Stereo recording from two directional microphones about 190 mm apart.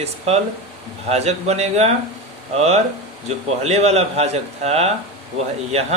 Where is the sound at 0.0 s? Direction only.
35° right (ahead or behind).